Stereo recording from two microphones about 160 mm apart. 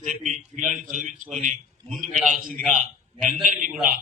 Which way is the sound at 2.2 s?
60° right (ahead or behind).